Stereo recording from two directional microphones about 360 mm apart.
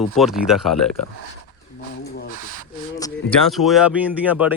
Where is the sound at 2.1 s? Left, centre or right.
Left.